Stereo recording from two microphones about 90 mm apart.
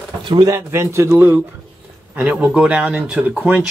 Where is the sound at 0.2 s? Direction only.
60° right (ahead or behind).